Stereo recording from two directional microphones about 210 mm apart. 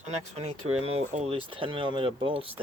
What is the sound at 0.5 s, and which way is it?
Speech, 90° right.